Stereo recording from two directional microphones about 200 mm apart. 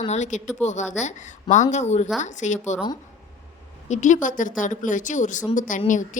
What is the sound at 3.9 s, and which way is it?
A woman's voice, 40° left (ahead or behind).